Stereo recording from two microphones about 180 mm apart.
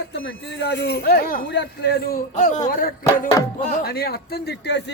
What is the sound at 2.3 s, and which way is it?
Speech, 45° left (ahead or behind).